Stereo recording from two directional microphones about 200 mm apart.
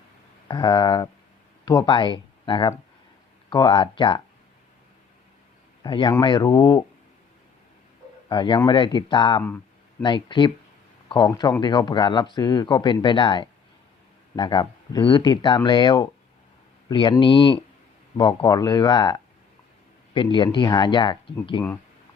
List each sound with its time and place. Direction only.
0.4 s speech: 20° left (ahead or behind)
5.8 s speech: 20° left (ahead or behind)
8.3 s speech: 25° left (ahead or behind)